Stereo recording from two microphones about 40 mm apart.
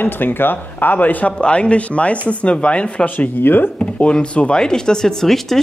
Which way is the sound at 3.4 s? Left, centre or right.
Left.